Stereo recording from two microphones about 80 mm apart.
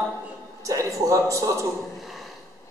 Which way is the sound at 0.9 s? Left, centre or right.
Right.